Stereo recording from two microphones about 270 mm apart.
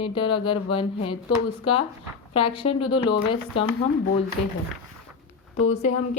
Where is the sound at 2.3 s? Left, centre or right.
Centre.